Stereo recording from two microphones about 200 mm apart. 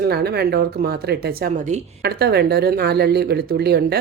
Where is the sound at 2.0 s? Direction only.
55° right (ahead or behind).